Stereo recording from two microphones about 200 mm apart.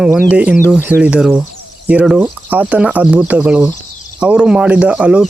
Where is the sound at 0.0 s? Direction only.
5° right (ahead or behind).